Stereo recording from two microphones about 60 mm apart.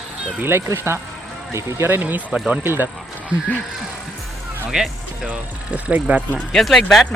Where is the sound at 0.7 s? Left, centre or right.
Right.